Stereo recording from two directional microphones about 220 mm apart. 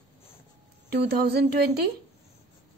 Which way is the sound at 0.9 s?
45° right (ahead or behind).